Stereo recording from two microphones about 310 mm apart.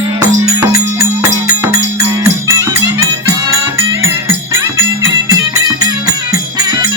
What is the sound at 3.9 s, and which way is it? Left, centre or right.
Music, centre.